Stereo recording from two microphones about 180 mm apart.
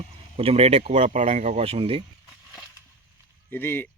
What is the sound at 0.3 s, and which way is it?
Speech, 35° right (ahead or behind).